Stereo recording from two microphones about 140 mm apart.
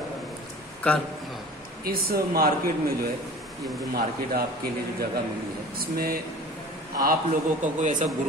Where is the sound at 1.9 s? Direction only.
90° right.